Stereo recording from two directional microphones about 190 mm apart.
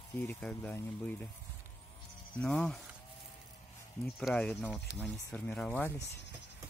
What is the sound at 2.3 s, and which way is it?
Speech, 5° left (ahead or behind).